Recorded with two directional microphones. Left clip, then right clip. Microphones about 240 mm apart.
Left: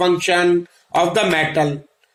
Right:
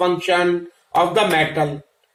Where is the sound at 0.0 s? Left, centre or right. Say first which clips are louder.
Left 2 dB; left.